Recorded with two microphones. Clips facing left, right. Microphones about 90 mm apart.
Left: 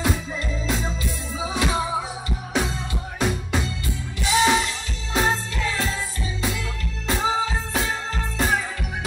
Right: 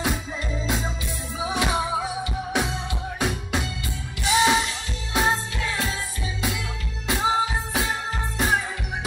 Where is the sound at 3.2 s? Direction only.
15° right (ahead or behind).